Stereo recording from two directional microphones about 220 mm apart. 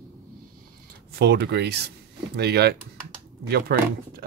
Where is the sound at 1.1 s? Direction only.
50° right (ahead or behind).